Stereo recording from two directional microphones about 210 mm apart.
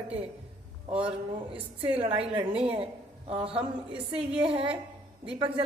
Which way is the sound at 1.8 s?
25° right (ahead or behind).